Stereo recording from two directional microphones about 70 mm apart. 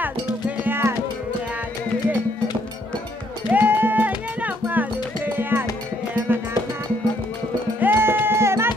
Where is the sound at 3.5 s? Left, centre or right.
Right.